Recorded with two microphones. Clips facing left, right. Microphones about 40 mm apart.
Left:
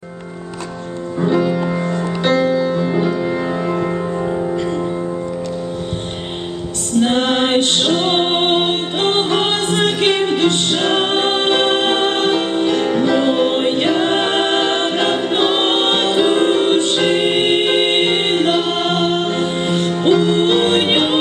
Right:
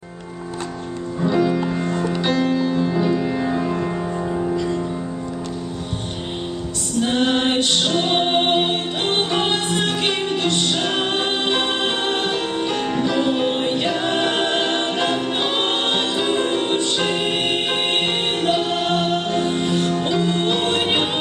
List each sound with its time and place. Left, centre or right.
1.9 s music: left
2.3 s music: left
2.7 s music: left
3.0 s music: left
7.0 s music: left